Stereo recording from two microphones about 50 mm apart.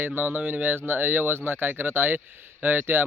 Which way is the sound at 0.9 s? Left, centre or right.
Right.